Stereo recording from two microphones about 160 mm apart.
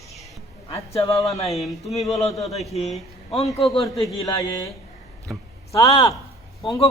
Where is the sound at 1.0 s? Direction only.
20° left (ahead or behind).